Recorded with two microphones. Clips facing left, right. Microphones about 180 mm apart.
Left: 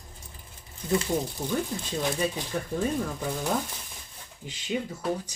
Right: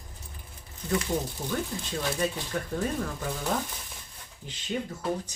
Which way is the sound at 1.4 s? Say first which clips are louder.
Left 2 dB; 10° left (ahead or behind).